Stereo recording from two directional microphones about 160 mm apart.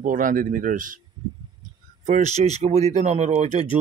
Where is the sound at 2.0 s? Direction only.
45° right (ahead or behind).